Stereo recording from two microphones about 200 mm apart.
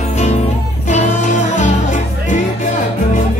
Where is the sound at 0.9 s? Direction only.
35° left (ahead or behind).